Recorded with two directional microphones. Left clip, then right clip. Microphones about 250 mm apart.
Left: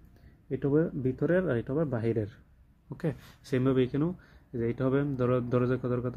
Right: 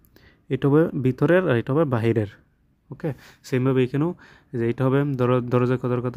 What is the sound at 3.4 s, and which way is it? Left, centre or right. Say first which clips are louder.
A man's voice: right 5 dB; right.